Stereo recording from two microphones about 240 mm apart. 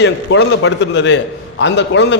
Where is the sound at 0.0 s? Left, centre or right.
Left.